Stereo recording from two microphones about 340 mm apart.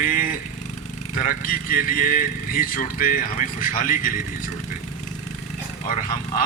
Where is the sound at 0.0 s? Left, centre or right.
Left.